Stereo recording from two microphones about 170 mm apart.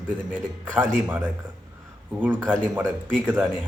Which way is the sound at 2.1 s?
10° right (ahead or behind).